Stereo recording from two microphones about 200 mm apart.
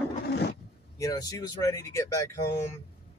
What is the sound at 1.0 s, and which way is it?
Speech, 15° left (ahead or behind).